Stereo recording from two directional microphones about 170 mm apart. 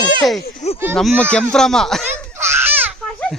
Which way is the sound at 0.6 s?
40° left (ahead or behind).